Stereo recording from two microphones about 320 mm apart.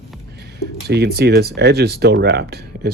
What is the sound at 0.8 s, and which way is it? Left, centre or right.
Speech, right.